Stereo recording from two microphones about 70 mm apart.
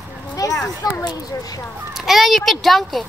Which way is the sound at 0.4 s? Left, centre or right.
Left.